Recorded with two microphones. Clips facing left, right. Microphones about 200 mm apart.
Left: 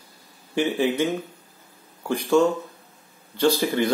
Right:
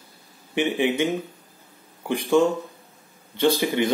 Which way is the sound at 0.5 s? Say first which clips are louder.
Even; 15° right (ahead or behind).